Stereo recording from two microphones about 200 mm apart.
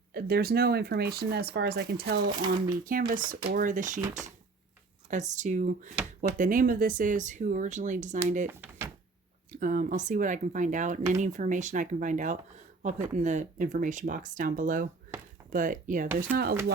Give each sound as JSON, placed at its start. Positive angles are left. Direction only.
{"t": 0.1, "sound": "speech", "side_deg": -50}
{"t": 5.1, "sound": "speech", "side_deg": -35}
{"t": 8.4, "sound": "drawer open or close", "side_deg": -10}
{"t": 9.6, "sound": "speech", "side_deg": -40}
{"t": 15.1, "sound": "a sound", "side_deg": -10}
{"t": 15.5, "sound": "speech", "side_deg": -40}